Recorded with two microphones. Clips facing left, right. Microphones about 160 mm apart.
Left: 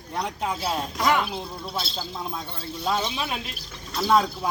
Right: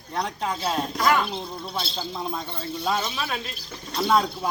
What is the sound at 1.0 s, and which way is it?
Speech, 20° left (ahead or behind).